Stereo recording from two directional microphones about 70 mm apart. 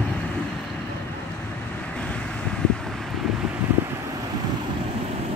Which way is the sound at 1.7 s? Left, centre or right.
Centre.